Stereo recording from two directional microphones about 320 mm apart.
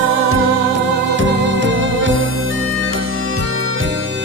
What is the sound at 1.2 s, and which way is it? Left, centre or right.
Music, right.